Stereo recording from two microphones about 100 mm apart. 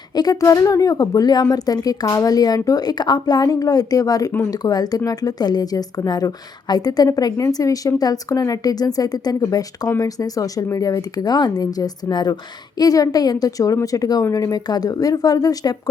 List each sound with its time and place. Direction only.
0.2 s speech: 40° left (ahead or behind)